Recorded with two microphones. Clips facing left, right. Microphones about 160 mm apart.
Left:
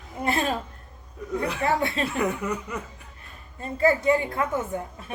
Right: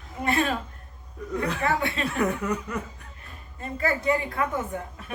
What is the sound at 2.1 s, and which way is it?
Speech, 10° left (ahead or behind).